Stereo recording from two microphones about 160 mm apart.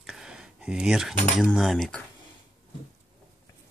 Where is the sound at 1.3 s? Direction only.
Centre (ahead or behind).